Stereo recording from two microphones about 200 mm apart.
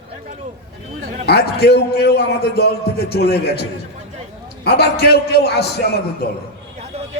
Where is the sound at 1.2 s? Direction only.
55° left (ahead or behind).